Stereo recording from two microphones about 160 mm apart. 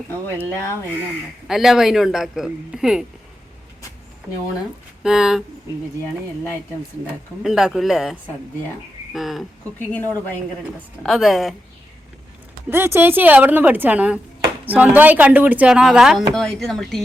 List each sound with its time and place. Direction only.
1.5 s a man's voice: centre (ahead or behind)
5.0 s a man's voice: 5° right (ahead or behind)
7.1 s a man's voice: 5° right (ahead or behind)
9.8 s a woman's voice: 10° left (ahead or behind)
11.0 s a man's voice: centre (ahead or behind)
12.7 s a man's voice: 15° right (ahead or behind); by 17.0 s 5° left (ahead or behind)